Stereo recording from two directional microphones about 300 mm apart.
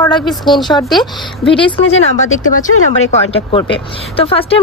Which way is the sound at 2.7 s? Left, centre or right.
Left.